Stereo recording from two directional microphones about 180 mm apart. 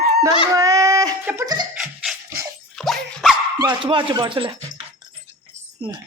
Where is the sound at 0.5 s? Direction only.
20° right (ahead or behind).